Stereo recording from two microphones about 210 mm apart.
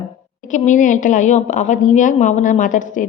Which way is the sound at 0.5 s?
35° left (ahead or behind).